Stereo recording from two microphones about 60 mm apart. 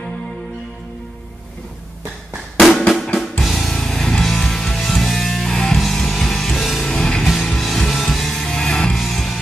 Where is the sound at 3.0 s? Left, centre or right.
Centre.